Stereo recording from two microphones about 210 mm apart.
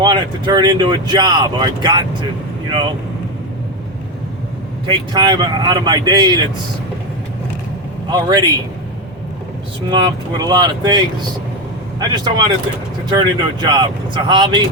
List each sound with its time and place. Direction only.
0.0 s speech: 20° right (ahead or behind)
4.9 s speech: 20° right (ahead or behind)
8.1 s speech: 20° right (ahead or behind)
9.9 s speech: 20° right (ahead or behind)